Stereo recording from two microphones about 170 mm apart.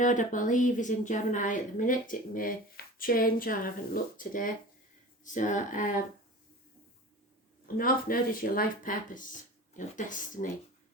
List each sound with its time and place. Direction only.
0.0 s a woman's voice: 50° left (ahead or behind)
7.8 s a woman's voice: 60° left (ahead or behind)